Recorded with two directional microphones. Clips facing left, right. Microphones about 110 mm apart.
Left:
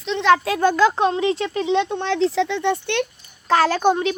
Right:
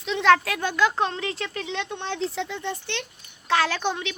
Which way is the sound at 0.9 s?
20° left (ahead or behind).